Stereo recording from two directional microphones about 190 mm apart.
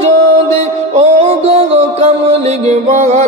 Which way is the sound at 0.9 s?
30° right (ahead or behind).